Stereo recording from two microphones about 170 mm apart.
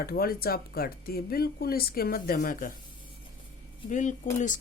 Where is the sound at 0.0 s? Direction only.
60° left (ahead or behind).